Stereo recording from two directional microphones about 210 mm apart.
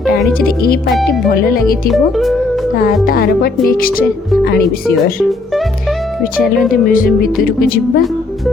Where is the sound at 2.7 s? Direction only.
45° left (ahead or behind).